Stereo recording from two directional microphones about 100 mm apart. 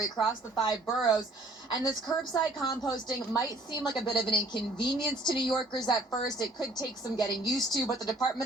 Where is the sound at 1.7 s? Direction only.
40° left (ahead or behind).